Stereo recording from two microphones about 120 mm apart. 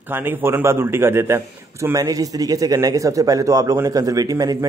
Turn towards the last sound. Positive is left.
turn(degrees=-30)  # may be behind; listen again after turning